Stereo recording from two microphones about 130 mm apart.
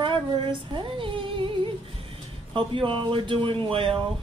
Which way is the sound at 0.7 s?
40° right (ahead or behind).